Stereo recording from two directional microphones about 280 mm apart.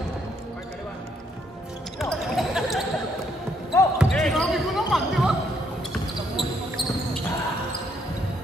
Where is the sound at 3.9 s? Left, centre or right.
Centre.